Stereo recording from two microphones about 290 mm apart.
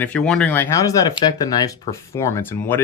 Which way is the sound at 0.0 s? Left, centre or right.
Centre.